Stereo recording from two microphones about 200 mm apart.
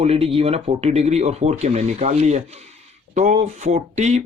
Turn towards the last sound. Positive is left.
turn(degrees=-35)  # may be behind; listen again after turning